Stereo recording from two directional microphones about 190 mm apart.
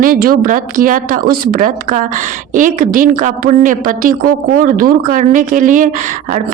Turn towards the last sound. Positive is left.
turn(degrees=-45)  # may be behind; listen again after turning